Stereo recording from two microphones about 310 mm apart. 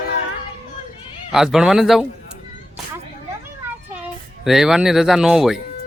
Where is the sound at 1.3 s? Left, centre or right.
Centre.